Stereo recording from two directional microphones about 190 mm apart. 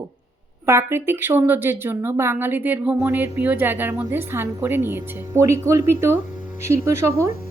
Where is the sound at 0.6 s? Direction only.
15° right (ahead or behind).